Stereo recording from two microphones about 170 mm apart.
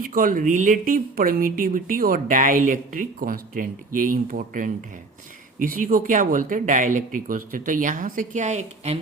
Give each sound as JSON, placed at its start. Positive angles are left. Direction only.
{"t": 0.0, "sound": "a woman's voice", "side_deg": -55}